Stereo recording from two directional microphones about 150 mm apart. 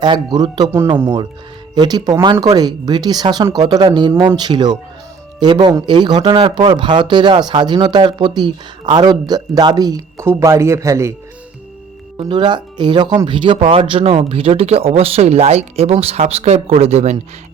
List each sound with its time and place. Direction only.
0.0 s speech: 30° right (ahead or behind)
1.7 s speech: 30° right (ahead or behind)
12.1 s speech: 30° right (ahead or behind); by 17.2 s 45° right (ahead or behind)